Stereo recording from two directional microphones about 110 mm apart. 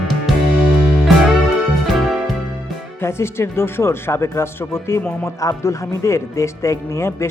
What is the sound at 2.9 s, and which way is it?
Speech, 25° left (ahead or behind).